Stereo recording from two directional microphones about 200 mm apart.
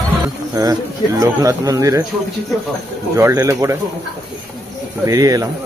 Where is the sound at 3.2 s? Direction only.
15° right (ahead or behind).